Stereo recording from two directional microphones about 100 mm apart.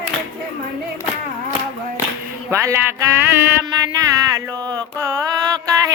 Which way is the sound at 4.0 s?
35° right (ahead or behind).